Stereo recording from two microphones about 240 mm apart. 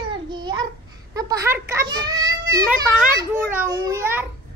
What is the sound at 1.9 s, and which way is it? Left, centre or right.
Child singing, centre.